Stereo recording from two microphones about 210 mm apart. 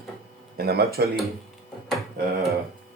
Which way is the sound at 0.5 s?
50° right (ahead or behind).